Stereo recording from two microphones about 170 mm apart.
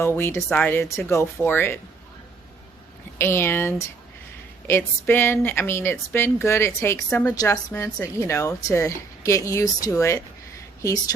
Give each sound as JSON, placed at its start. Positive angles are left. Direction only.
{"t": 0.0, "sound": "a woman's voice", "side_deg": 15}
{"t": 3.2, "sound": "a woman's voice", "side_deg": 15}
{"t": 5.0, "sound": "a woman's voice", "side_deg": 15}